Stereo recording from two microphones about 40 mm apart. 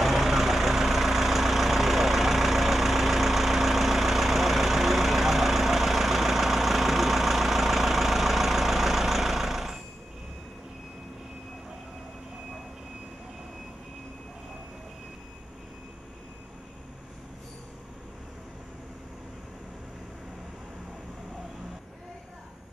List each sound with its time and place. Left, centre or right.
0.0 s vehicle: centre